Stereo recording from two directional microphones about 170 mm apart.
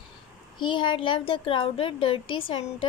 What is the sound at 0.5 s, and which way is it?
A woman's voice, 30° left (ahead or behind).